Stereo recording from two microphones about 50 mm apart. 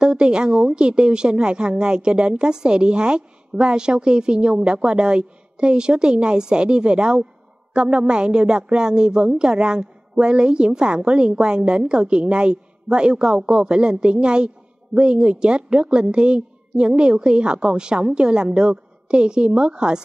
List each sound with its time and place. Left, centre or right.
0.0 s a woman's voice: centre